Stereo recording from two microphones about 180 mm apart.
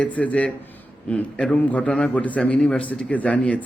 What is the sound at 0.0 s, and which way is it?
A man's voice, 10° left (ahead or behind).